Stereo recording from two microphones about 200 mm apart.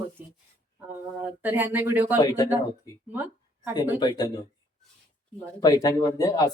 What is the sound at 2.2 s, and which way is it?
Speech, 20° left (ahead or behind).